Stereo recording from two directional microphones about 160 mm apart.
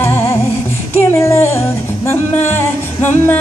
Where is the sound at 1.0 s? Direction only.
15° left (ahead or behind).